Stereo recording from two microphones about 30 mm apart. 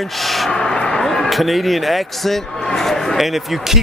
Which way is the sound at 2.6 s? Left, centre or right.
Centre.